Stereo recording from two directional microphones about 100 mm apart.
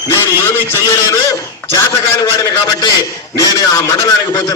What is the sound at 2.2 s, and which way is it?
A man's voice, 35° left (ahead or behind).